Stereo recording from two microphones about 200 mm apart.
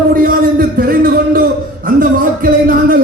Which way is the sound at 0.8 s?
45° right (ahead or behind).